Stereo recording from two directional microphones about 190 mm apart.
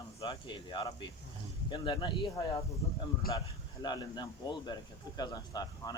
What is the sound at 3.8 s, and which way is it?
Speech, 20° left (ahead or behind).